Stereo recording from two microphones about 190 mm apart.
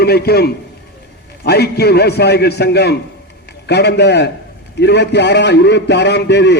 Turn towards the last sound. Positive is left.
turn(degrees=65)  # may be behind; listen again after turning